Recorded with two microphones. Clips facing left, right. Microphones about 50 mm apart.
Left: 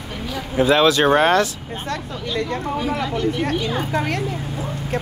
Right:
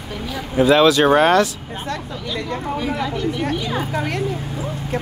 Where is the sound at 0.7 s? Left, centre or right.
Left.